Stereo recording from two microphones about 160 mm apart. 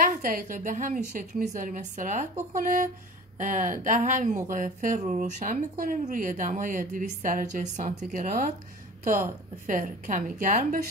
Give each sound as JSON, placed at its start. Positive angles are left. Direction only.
{"t": 0.1, "sound": "speech", "side_deg": -55}
{"t": 9.7, "sound": "speech", "side_deg": -55}